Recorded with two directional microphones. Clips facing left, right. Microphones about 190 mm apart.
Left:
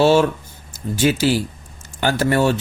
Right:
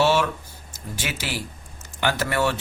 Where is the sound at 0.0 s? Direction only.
30° left (ahead or behind).